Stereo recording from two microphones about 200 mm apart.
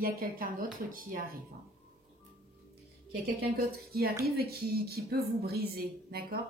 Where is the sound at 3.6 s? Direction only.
50° right (ahead or behind).